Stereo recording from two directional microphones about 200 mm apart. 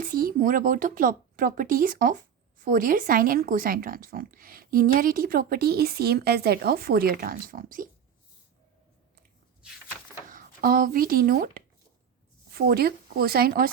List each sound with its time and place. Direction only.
0.0 s speech: 45° right (ahead or behind)
10.2 s speech: 45° right (ahead or behind)